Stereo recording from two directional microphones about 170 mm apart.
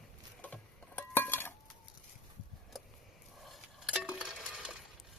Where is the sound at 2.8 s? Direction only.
Centre (ahead or behind).